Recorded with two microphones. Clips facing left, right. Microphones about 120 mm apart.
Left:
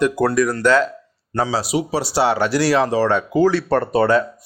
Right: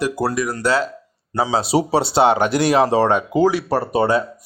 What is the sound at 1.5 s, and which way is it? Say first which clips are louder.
Speech: right 6 dB; 25° right (ahead or behind).